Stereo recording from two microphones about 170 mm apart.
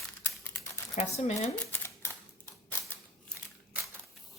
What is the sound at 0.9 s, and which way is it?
Speech, 40° left (ahead or behind).